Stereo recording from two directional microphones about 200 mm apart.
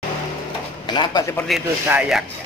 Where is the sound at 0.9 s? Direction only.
20° left (ahead or behind).